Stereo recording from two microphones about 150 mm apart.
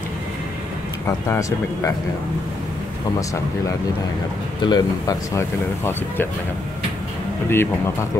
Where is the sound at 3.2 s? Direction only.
20° left (ahead or behind).